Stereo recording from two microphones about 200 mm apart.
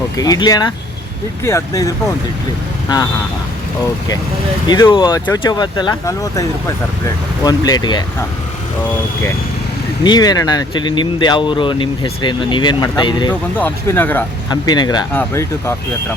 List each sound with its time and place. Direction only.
0.2 s speech: 20° left (ahead or behind)
4.7 s speech: 20° left (ahead or behind)
10.0 s speech: 20° left (ahead or behind)
13.6 s speech: 10° left (ahead or behind)
14.5 s speech: 20° left (ahead or behind)